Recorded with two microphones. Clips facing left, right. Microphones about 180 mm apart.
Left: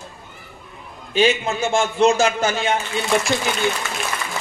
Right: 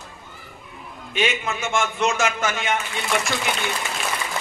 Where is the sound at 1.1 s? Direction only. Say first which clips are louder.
Left 6 dB; 30° left (ahead or behind).